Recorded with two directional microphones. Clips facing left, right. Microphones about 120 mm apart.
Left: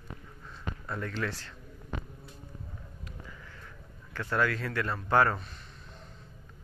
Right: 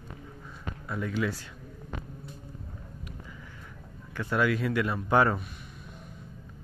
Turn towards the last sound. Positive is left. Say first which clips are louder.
# right 2 dB
turn(degrees=-15)  # may be behind; listen again after turning